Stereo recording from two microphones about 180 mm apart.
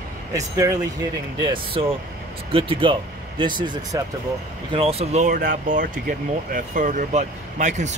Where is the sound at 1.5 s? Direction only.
30° right (ahead or behind).